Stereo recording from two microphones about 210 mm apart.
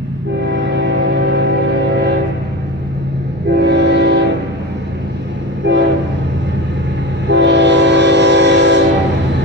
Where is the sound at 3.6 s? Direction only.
55° right (ahead or behind).